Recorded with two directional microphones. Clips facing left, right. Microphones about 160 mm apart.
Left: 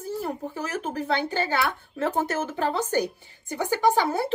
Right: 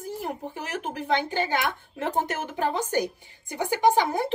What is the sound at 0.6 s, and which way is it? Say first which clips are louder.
Speech: left 3 dB; 40° left (ahead or behind).